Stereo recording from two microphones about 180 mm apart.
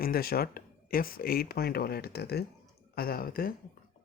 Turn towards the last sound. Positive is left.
turn(degrees=55)  # may be behind; listen again after turning